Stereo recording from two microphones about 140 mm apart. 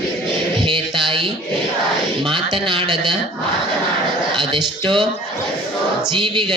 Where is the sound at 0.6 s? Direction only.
35° right (ahead or behind).